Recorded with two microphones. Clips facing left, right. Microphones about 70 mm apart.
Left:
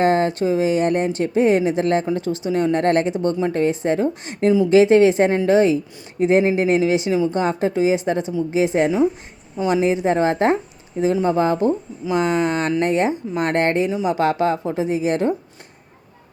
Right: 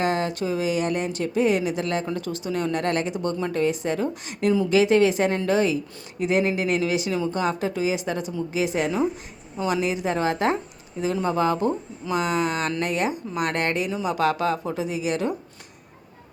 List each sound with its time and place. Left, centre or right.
0.0 s speech: left